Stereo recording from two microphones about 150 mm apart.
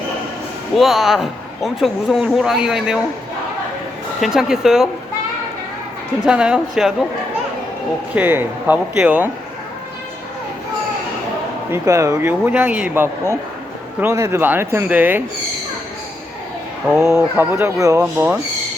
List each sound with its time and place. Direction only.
0.8 s speech: centre (ahead or behind)
4.2 s speech: 5° right (ahead or behind)
6.2 s speech: 5° right (ahead or behind)
8.1 s speech: 15° right (ahead or behind)
11.7 s speech: 20° right (ahead or behind)
17.2 s speech: 15° right (ahead or behind)